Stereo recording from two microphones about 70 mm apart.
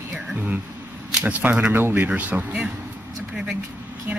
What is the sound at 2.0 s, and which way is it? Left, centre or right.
Speech, centre.